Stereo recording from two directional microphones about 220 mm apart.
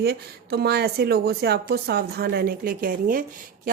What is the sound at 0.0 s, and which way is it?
A woman's voice, 45° right (ahead or behind).